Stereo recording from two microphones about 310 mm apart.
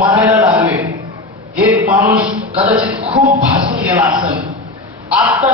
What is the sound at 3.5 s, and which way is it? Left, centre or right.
Music, centre.